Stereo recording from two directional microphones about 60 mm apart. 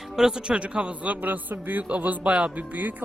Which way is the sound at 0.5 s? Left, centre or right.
Centre.